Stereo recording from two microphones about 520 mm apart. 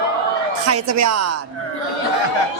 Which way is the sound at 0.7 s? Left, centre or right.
Right.